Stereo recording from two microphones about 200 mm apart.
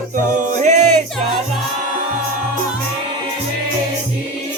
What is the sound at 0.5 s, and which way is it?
Music, 35° right (ahead or behind).